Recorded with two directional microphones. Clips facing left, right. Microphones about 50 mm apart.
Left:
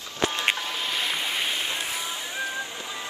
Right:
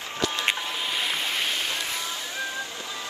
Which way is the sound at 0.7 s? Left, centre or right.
Centre.